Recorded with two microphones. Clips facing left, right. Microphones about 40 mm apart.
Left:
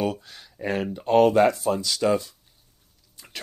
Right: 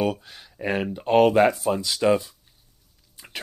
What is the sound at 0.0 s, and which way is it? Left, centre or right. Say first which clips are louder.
Speech: right 2 dB; centre.